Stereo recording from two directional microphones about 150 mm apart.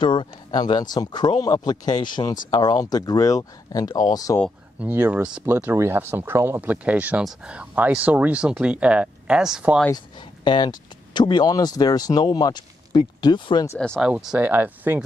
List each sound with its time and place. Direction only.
0.0 s speech: 30° left (ahead or behind)
4.7 s speech: 15° right (ahead or behind)
9.9 s speech: 30° left (ahead or behind)
13.7 s speech: 5° left (ahead or behind)
14.0 s speech: 5° right (ahead or behind)